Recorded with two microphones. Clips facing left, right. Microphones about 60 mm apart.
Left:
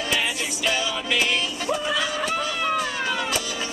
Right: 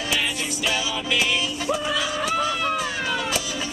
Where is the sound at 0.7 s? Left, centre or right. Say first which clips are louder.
Left 1 dB; centre.